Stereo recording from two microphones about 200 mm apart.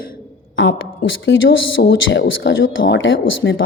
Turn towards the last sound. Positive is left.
turn(degrees=70)  # may be behind; listen again after turning